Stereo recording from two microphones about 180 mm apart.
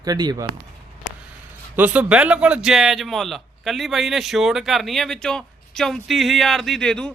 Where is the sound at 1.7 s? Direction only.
10° right (ahead or behind).